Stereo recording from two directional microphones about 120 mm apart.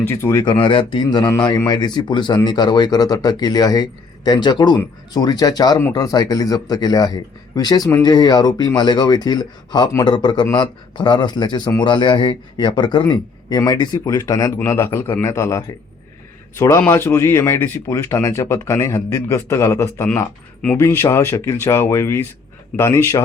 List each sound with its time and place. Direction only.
0.2 s speech: 25° left (ahead or behind)
0.4 s a man's voice: 45° left (ahead or behind); by 22.3 s 20° left (ahead or behind)